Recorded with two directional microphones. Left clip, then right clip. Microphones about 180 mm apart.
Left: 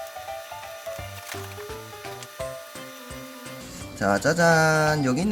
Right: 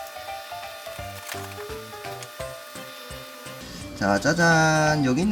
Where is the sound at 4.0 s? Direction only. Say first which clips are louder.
Even; 15° left (ahead or behind).